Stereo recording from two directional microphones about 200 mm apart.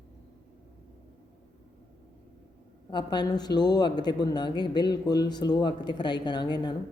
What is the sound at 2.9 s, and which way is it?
Speech, 20° left (ahead or behind).